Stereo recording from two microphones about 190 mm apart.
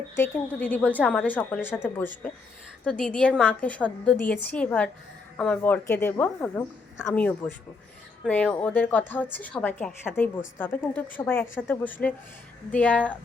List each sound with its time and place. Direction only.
0.2 s a woman's voice: 10° left (ahead or behind)